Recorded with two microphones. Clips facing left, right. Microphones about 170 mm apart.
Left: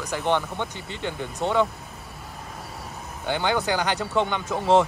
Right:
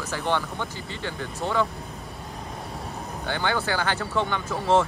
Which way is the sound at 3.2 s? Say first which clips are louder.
Left 3 dB; 15° left (ahead or behind).